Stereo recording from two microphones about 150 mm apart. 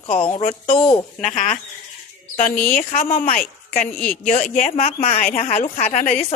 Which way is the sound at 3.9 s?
5° left (ahead or behind).